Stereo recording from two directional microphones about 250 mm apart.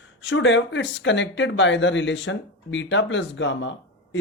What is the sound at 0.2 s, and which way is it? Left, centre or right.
Speech, left.